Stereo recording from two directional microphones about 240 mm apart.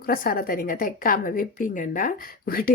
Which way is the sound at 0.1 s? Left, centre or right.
Left.